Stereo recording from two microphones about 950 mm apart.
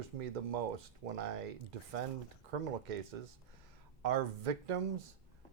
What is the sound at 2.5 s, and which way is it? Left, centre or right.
Speech, right.